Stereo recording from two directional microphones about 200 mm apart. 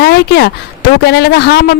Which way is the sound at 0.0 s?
55° left (ahead or behind).